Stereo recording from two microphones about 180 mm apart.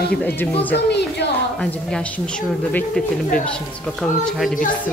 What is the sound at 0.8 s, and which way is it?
Speech, 70° left (ahead or behind).